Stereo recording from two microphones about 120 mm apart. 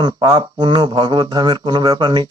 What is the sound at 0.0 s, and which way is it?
Speech, 35° right (ahead or behind).